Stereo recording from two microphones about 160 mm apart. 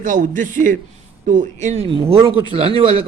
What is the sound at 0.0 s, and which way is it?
A man's voice, 55° right (ahead or behind).